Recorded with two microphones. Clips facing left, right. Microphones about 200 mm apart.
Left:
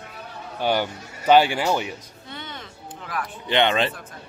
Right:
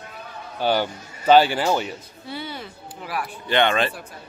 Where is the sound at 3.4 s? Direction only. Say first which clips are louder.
Even; 20° left (ahead or behind).